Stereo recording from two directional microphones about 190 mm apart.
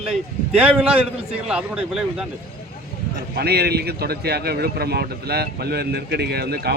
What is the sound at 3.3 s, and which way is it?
Speech, 60° right (ahead or behind).